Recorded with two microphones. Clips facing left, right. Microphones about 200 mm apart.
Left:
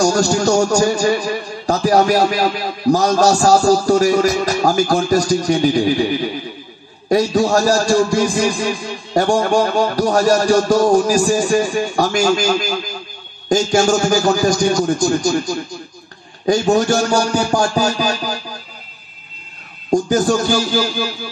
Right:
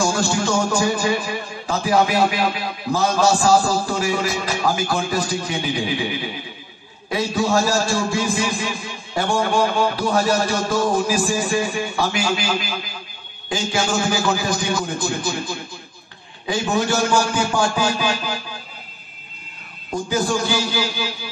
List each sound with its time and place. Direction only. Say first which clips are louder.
0.0 s a man's voice: left 6 dB; 40° left (ahead or behind)
7.1 s a man's voice: left 6 dB; 45° left (ahead or behind)
16.4 s a sound: left 7 dB; 45° left (ahead or behind)
19.9 s a man's voice: left 7 dB; 45° left (ahead or behind)